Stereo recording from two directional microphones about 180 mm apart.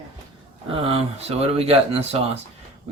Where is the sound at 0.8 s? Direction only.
35° right (ahead or behind).